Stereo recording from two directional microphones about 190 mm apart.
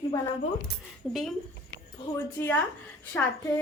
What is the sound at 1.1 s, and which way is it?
Speech, centre (ahead or behind).